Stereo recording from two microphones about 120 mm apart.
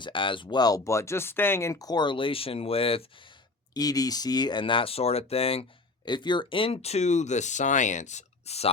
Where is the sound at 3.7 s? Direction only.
30° left (ahead or behind).